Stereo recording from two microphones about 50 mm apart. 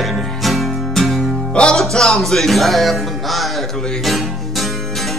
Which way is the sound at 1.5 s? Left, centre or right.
Centre.